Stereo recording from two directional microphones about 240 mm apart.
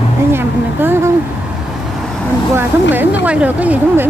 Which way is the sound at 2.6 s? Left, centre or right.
Centre.